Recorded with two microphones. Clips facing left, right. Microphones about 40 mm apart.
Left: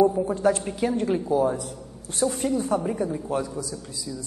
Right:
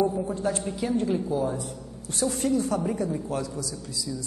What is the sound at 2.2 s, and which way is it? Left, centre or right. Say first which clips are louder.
Speech: left 3 dB; centre.